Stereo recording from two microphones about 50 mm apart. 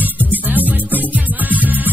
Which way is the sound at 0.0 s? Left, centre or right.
Right.